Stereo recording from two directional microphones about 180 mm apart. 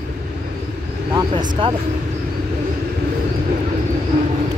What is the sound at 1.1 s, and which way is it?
Speech, 25° right (ahead or behind).